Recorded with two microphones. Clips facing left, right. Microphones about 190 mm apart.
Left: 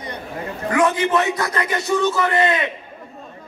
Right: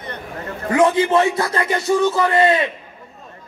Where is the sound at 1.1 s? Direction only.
25° right (ahead or behind).